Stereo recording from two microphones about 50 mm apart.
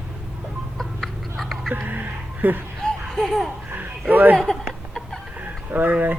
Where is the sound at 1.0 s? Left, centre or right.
Centre.